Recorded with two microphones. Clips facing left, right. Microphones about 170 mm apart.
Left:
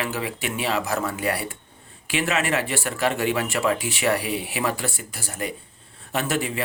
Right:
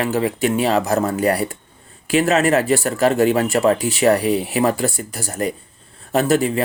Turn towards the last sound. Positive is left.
turn(degrees=-40)  # may be behind; listen again after turning